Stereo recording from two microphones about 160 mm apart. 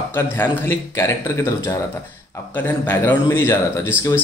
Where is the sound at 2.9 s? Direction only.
20° left (ahead or behind).